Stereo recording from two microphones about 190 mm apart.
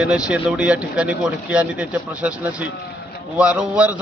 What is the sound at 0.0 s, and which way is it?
A man's voice, 5° right (ahead or behind).